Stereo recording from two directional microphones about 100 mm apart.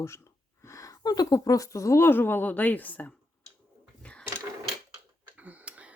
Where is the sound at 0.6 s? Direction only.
30° left (ahead or behind); by 3.1 s 15° left (ahead or behind).